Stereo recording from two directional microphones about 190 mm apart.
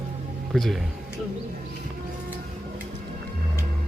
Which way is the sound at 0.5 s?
Centre (ahead or behind).